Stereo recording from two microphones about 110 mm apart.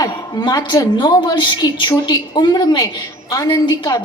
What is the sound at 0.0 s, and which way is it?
A woman's voice, 35° left (ahead or behind).